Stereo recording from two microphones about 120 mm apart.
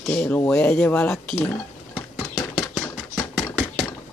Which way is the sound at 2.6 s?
20° left (ahead or behind).